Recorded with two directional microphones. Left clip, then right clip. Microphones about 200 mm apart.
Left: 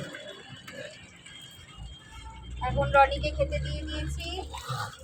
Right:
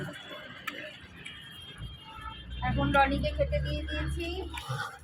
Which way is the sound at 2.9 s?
55° left (ahead or behind).